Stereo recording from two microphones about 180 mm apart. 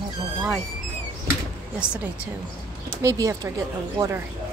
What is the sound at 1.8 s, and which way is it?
Speech, 5° right (ahead or behind).